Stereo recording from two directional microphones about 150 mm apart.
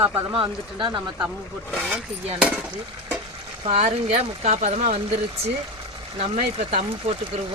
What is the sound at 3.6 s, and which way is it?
Speech, 45° right (ahead or behind).